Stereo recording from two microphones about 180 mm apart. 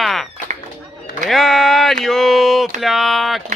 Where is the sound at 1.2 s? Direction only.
Centre (ahead or behind).